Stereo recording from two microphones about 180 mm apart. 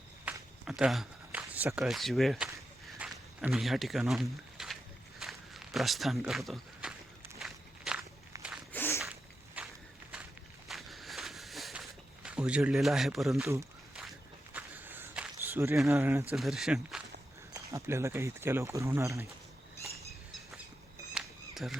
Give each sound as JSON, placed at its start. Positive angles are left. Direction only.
{"t": 0.3, "sound": "a sound", "side_deg": -5}
{"t": 7.3, "sound": "walk", "side_deg": -5}
{"t": 8.7, "sound": "a sound", "side_deg": 10}
{"t": 9.6, "sound": "walk", "side_deg": -10}
{"t": 14.5, "sound": "walk", "side_deg": -10}
{"t": 15.9, "sound": "speech", "side_deg": -15}
{"t": 16.3, "sound": "speech", "side_deg": 0}
{"t": 17.5, "sound": "speech", "side_deg": -15}
{"t": 21.1, "sound": "a sound", "side_deg": 0}